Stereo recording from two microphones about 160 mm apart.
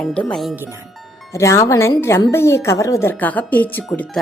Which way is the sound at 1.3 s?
20° left (ahead or behind).